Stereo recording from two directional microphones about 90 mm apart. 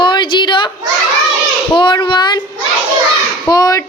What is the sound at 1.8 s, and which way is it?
Child singing, 60° left (ahead or behind).